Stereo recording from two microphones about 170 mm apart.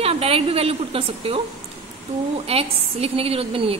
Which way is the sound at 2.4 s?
35° right (ahead or behind).